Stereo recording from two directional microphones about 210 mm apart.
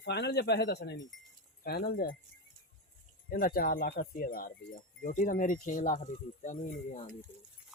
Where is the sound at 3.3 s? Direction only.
45° left (ahead or behind).